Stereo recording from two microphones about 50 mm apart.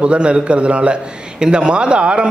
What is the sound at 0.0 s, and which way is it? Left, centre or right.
A man's voice, right.